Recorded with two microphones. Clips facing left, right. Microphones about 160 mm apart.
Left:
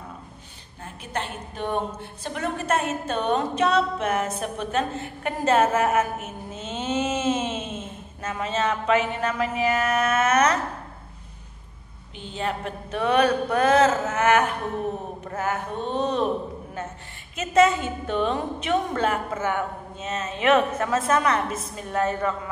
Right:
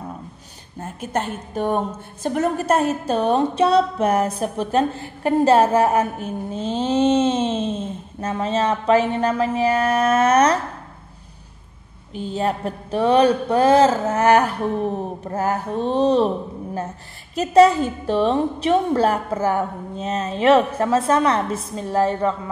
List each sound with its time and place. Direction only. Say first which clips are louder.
0.7 s a woman's voice: right 7 dB; 45° right (ahead or behind)
12.2 s a woman's voice: right 6 dB; 40° right (ahead or behind)
17.4 s a woman's voice: right 6 dB; 35° right (ahead or behind)